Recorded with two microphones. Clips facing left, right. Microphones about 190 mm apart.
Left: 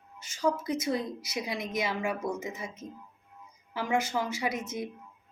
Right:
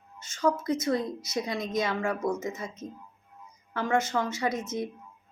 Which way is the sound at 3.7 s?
10° left (ahead or behind).